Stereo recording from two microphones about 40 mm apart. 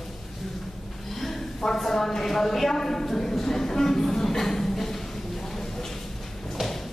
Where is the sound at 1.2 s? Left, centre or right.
Centre.